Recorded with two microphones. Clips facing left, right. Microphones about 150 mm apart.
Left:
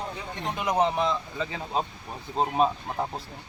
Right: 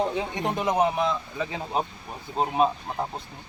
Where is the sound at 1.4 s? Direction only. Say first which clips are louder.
Right 1 dB; 15° right (ahead or behind).